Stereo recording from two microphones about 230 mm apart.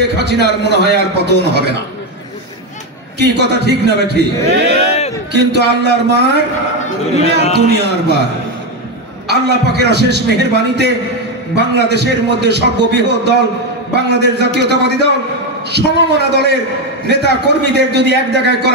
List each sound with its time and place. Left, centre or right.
0.2 s a man's voice: right
3.2 s a man's voice: right
7.5 s a man's voice: right
9.3 s a man's voice: right